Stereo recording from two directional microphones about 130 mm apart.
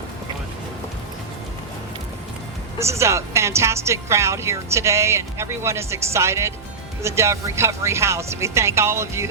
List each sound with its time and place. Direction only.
2.7 s a woman's voice: 20° right (ahead or behind)